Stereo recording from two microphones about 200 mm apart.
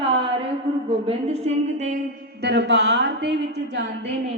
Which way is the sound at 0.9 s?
30° right (ahead or behind).